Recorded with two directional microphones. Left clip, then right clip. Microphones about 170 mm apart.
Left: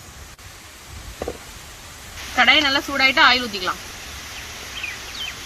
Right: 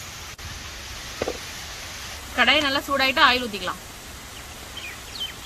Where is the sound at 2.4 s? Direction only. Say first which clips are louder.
Left 4 dB; 50° right (ahead or behind).